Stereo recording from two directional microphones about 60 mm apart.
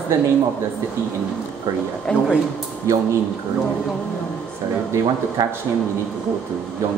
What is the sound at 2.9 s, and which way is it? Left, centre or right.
Speech, right.